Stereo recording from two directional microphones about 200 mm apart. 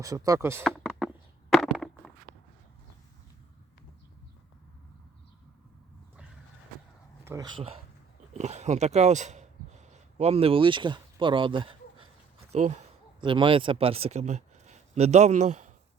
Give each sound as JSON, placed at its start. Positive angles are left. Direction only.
{"t": 0.0, "sound": "speech", "side_deg": -15}
{"t": 0.6, "sound": "a sound", "side_deg": 0}
{"t": 7.3, "sound": "speech", "side_deg": -15}
{"t": 8.3, "sound": "speech", "side_deg": -35}
{"t": 13.1, "sound": "speech", "side_deg": -25}